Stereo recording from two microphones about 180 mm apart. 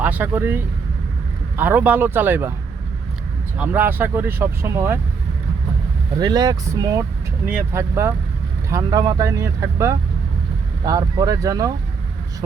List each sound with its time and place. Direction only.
0.0 s speech: 10° right (ahead or behind)
3.6 s speech: 10° right (ahead or behind)
6.1 s speech: 20° right (ahead or behind)